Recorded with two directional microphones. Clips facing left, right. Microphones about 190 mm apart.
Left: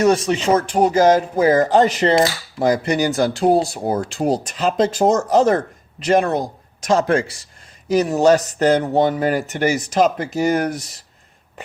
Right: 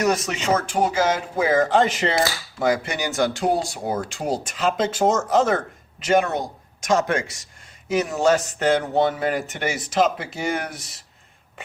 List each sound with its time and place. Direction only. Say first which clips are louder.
0.0 s speech: left 6 dB; 30° left (ahead or behind)